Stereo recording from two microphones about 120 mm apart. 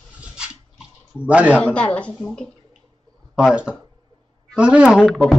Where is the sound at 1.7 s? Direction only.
10° left (ahead or behind).